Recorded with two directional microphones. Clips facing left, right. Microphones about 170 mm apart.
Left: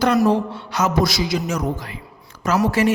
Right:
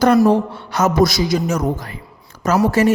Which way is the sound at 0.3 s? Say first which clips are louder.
Right 3 dB; 50° right (ahead or behind).